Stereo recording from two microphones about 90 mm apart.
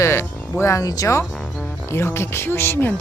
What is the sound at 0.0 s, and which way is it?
A woman's voice, 30° left (ahead or behind).